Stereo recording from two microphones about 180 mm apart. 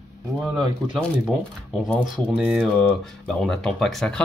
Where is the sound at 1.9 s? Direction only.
Centre (ahead or behind).